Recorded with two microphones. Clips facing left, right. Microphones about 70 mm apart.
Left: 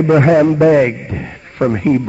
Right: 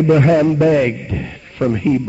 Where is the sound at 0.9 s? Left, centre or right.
Left.